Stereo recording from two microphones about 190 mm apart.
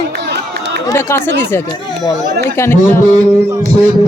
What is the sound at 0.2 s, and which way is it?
Run, 60° right (ahead or behind).